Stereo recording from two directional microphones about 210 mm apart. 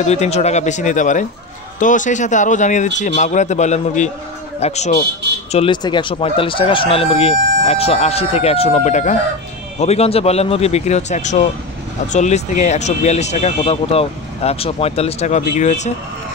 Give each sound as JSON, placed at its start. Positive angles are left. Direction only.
{"t": 0.0, "sound": "speech", "side_deg": 30}